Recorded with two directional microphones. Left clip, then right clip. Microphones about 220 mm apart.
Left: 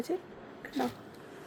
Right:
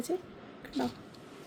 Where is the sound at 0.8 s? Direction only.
30° right (ahead or behind).